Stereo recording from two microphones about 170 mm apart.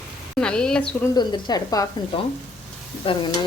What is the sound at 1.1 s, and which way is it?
Speech, 25° left (ahead or behind).